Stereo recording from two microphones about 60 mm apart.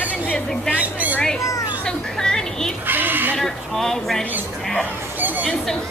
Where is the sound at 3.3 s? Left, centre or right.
Centre.